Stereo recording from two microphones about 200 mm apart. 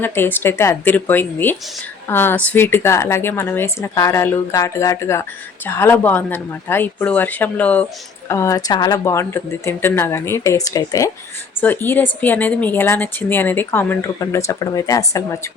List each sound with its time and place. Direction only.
0.0 s a woman's voice: 10° left (ahead or behind)